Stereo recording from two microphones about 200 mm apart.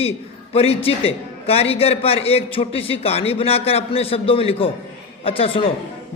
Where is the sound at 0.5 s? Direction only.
30° left (ahead or behind).